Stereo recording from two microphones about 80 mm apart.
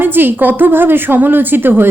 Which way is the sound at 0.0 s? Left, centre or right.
Right.